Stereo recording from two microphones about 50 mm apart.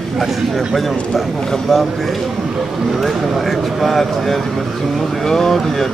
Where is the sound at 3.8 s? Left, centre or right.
Centre.